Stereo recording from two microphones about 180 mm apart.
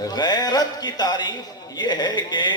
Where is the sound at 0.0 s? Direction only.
20° left (ahead or behind).